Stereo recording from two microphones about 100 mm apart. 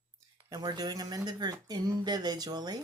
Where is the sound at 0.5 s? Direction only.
40° right (ahead or behind).